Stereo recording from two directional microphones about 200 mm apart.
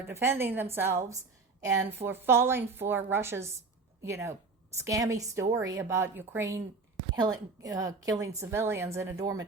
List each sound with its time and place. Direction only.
0.1 s a woman's voice: 10° right (ahead or behind)